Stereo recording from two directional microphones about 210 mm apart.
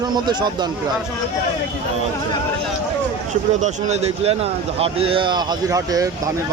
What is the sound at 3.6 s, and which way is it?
Speech, 30° right (ahead or behind).